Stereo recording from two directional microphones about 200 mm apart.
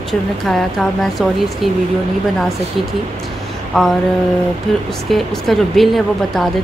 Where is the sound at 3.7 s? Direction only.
Centre (ahead or behind).